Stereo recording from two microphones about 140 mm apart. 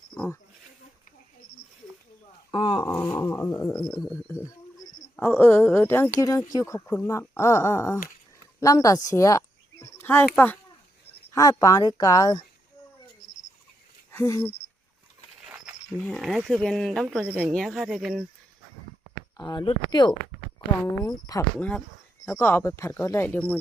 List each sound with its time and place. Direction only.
2.5 s speech: 35° left (ahead or behind)
2.8 s speech: 20° left (ahead or behind)
4.1 s a sound: 15° left (ahead or behind)
5.2 s speech: 15° left (ahead or behind)
11.3 s speech: 25° left (ahead or behind)
14.1 s a sound: 20° left (ahead or behind)
15.4 s wild animals: 5° right (ahead or behind)
16.0 s speech: 5° left (ahead or behind)
19.4 s speech: 30° left (ahead or behind)
21.6 s speech: 10° left (ahead or behind)